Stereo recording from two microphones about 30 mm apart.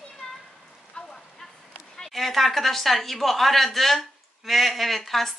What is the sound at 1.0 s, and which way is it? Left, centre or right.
Rain on surface, left.